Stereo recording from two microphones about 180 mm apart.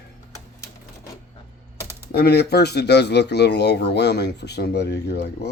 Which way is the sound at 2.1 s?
60° left (ahead or behind).